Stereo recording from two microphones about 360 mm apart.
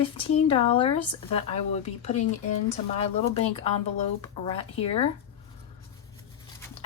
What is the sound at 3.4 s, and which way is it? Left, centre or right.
Speech, centre.